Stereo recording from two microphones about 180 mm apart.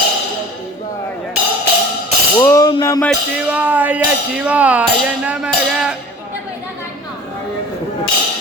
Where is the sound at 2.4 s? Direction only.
20° left (ahead or behind).